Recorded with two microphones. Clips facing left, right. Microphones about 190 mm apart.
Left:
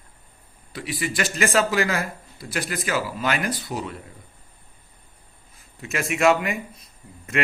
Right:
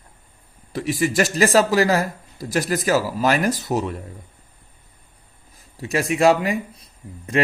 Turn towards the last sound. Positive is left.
turn(degrees=-35)  # may be behind; listen again after turning